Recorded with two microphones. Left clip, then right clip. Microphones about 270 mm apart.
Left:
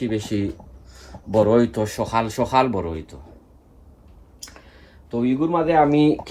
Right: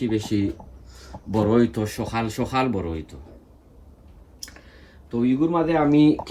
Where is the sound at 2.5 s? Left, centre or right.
Left.